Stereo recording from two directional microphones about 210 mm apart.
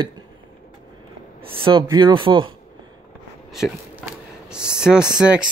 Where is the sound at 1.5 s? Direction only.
25° right (ahead or behind).